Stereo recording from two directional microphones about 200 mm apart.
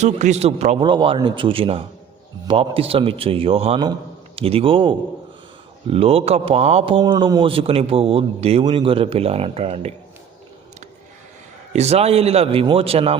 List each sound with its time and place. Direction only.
0.0 s a man's voice: 35° right (ahead or behind)
11.7 s a man's voice: 30° right (ahead or behind)